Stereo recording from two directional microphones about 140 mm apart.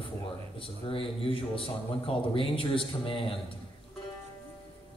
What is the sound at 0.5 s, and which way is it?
A man's voice, 40° left (ahead or behind).